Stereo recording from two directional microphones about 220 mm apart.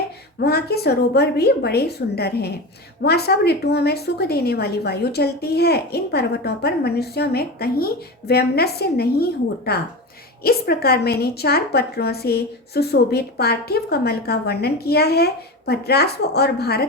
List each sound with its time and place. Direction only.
0.3 s a woman's voice: 45° left (ahead or behind)